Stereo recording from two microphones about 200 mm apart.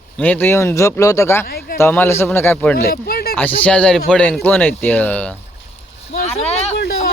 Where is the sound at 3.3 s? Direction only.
5° left (ahead or behind).